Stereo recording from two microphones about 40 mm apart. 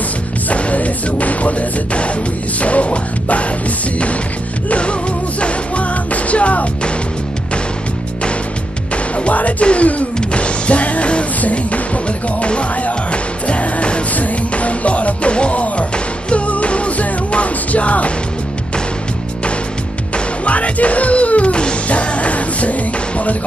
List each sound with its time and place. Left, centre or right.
0.5 s music: left
4.6 s music: left
8.9 s music: left
20.4 s music: left